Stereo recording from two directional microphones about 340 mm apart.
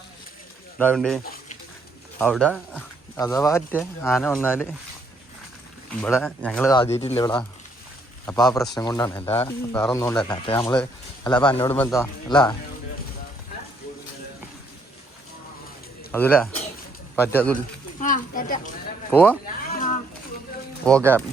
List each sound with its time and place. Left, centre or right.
0.8 s speech: centre
5.9 s speech: centre
16.1 s speech: centre
18.0 s speech: left
19.1 s speech: centre
20.8 s speech: centre